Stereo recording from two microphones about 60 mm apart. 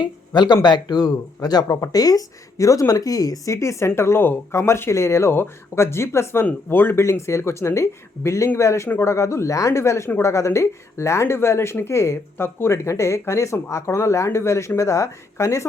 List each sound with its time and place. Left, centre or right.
1.1 s speech: left
5.3 s speech: left
6.4 s speech: left
7.0 s speech: left
14.8 s speech: left